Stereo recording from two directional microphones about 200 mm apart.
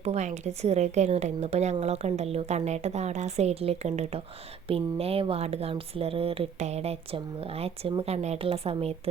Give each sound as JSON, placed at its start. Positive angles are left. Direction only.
{"t": 0.0, "sound": "a woman's voice", "side_deg": -35}